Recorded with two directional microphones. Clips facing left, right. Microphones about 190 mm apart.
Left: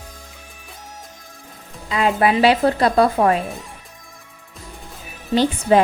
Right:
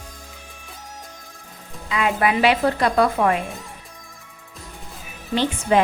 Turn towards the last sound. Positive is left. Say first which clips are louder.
# left 4 dB
turn(degrees=35)  # may be behind; listen again after turning